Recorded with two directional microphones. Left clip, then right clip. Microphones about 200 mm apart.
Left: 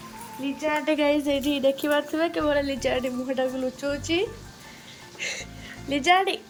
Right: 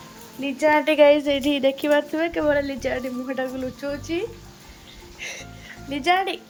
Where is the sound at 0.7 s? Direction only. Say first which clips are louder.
Right 6 dB; 45° right (ahead or behind).